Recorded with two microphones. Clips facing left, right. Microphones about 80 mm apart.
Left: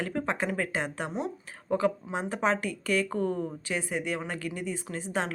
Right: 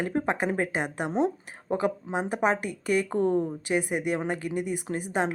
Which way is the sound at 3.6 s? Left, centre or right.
Centre.